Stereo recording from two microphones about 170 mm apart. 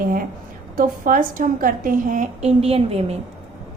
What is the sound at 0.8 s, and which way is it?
A woman's voice, 50° right (ahead or behind).